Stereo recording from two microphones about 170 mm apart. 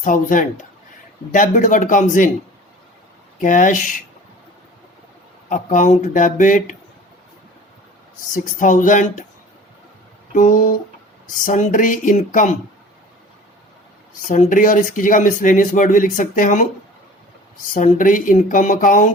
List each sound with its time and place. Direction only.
0.0 s speech: 50° left (ahead or behind)
3.4 s speech: 50° left (ahead or behind)
5.5 s speech: 50° left (ahead or behind)
8.3 s speech: 50° left (ahead or behind)
10.3 s speech: 50° left (ahead or behind)
14.2 s speech: 50° left (ahead or behind)
17.7 s speech: 50° left (ahead or behind)